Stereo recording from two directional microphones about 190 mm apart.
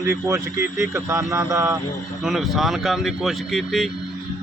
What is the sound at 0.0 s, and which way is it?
Speech, 15° right (ahead or behind).